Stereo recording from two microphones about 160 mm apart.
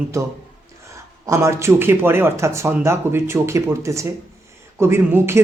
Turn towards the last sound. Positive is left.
turn(degrees=-15)  # may be behind; listen again after turning